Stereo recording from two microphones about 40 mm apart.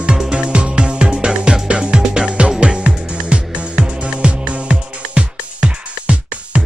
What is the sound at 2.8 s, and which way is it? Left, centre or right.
Music, right.